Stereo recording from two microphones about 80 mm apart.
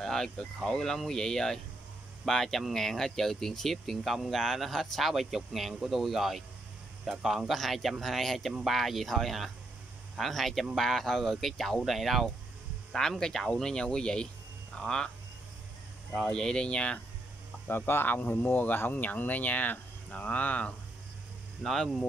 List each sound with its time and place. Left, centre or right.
0.0 s speech: centre
16.1 s speech: centre
17.6 s speech: left
21.6 s speech: centre